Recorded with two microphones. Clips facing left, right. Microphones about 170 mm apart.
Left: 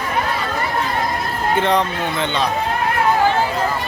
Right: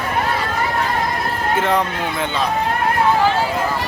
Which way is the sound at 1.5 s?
5° right (ahead or behind).